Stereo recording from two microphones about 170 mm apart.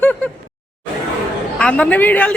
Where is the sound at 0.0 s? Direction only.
10° left (ahead or behind).